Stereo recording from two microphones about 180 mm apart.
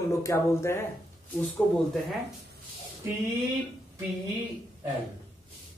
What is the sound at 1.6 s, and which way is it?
Speech, 5° left (ahead or behind).